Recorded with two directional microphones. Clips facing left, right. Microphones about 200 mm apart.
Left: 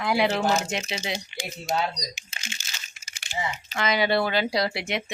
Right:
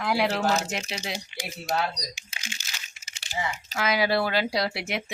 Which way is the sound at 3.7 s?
5° right (ahead or behind).